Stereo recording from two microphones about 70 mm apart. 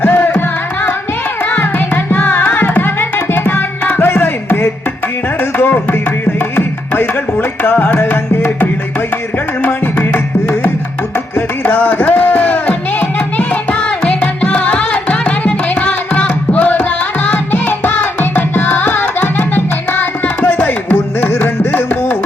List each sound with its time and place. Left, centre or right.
0.0 s music: left
2.0 s carnatic music: left
2.6 s tabla: left
5.4 s music: left
17.2 s tabla: left
21.2 s carnatic music: left